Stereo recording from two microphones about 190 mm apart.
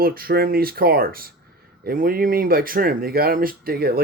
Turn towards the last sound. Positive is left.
turn(degrees=-50)  # may be behind; listen again after turning